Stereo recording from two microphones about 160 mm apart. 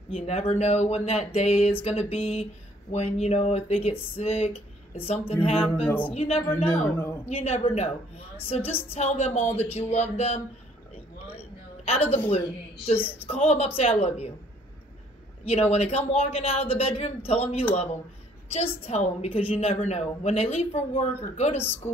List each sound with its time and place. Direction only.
0.1 s speech: 40° left (ahead or behind)
5.9 s a woman's voice: 10° left (ahead or behind)
6.1 s speech: 40° left (ahead or behind)
6.8 s a woman's voice: 15° left (ahead or behind)
7.2 s speech: 40° left (ahead or behind)
11.3 s a sound: 40° left (ahead or behind)
12.3 s speech: 40° left (ahead or behind)
12.9 s a woman's voice: 10° left (ahead or behind)
13.3 s speech: 40° left (ahead or behind)
15.4 s speech: 40° left (ahead or behind)
18.9 s speech: 40° left (ahead or behind)